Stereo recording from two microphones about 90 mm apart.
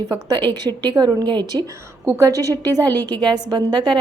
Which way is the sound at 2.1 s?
40° right (ahead or behind).